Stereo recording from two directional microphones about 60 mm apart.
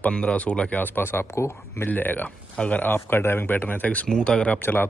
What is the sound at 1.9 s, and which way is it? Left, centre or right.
Speech, left.